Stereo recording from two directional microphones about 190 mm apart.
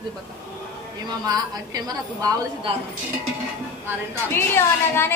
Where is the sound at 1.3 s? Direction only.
20° right (ahead or behind).